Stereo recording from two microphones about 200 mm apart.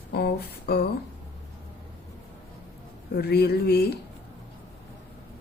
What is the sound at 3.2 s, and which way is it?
Speech, 50° left (ahead or behind).